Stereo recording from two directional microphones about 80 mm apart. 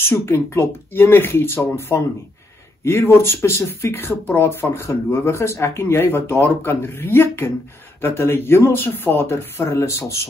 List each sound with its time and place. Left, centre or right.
0.0 s speech: left